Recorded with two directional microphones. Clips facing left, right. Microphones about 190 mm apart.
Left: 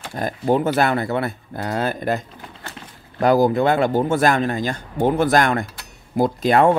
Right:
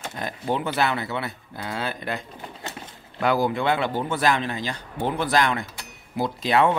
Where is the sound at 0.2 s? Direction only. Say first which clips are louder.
Left 8 dB; 45° left (ahead or behind).